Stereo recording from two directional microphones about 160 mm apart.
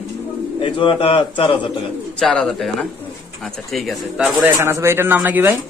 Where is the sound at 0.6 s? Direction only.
30° left (ahead or behind).